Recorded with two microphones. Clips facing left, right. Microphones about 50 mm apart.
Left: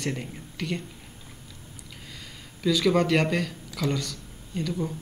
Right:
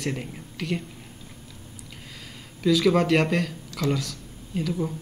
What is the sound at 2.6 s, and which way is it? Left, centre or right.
Speech, centre.